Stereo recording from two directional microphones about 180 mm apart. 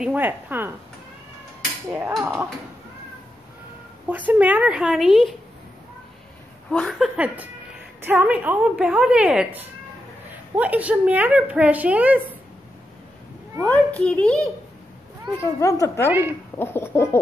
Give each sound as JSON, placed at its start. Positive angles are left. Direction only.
{"t": 0.0, "sound": "a woman's voice", "side_deg": -10}
{"t": 1.9, "sound": "a woman's voice", "side_deg": -10}
{"t": 4.3, "sound": "a woman's voice", "side_deg": -10}
{"t": 6.7, "sound": "a woman's voice", "side_deg": 5}
{"t": 13.7, "sound": "a child's voice", "side_deg": 10}
{"t": 15.6, "sound": "a child's voice", "side_deg": 15}
{"t": 16.1, "sound": "a woman's voice", "side_deg": -10}
{"t": 16.5, "sound": "a child's voice", "side_deg": 15}